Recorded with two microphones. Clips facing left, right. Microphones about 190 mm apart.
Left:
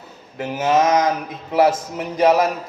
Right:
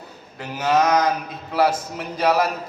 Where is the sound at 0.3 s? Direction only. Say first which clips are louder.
Left 2 dB; 20° left (ahead or behind).